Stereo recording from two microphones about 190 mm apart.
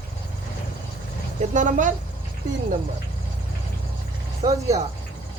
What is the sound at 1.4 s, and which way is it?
Speech, 40° right (ahead or behind).